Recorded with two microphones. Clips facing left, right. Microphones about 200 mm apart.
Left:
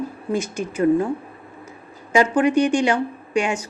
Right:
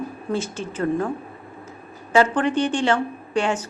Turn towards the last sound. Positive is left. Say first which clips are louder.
# left 1 dB
turn(degrees=10)  # may be behind; listen again after turning